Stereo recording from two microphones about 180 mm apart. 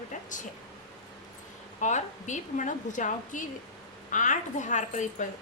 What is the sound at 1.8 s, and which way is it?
A woman's voice, 40° left (ahead or behind).